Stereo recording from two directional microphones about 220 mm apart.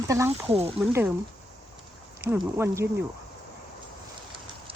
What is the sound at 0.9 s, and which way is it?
Speech, 10° right (ahead or behind).